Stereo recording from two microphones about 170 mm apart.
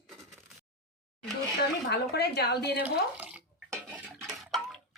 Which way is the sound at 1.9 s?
75° left (ahead or behind).